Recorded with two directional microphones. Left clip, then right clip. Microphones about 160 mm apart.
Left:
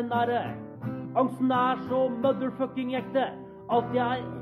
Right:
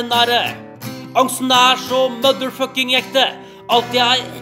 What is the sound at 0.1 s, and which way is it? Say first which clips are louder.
Music: right 13 dB; 15° right (ahead or behind).